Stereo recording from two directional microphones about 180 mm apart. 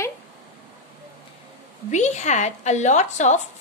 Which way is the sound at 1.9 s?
40° left (ahead or behind).